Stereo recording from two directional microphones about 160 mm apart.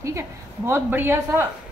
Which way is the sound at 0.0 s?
15° right (ahead or behind).